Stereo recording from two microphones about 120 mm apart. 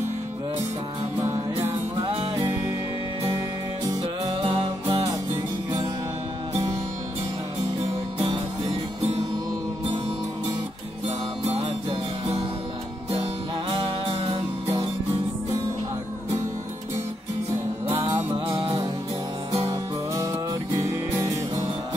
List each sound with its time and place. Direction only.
3.3 s music: 30° right (ahead or behind)
4.0 s music: 50° right (ahead or behind)
5.3 s music: 30° right (ahead or behind)
11.1 s music: 60° right (ahead or behind)
13.1 s music: 40° right (ahead or behind)
18.0 s music: 40° right (ahead or behind)
19.5 s music: 35° right (ahead or behind)